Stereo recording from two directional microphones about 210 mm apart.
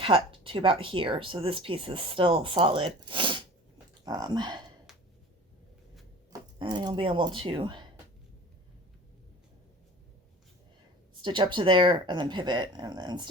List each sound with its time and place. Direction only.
0.0 s speech: 25° right (ahead or behind)
4.9 s a sound: centre (ahead or behind)
6.3 s speech: 20° right (ahead or behind)
11.2 s speech: 20° right (ahead or behind)